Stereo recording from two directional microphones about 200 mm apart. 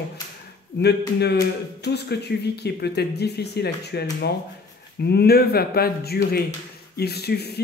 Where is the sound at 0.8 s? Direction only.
55° left (ahead or behind).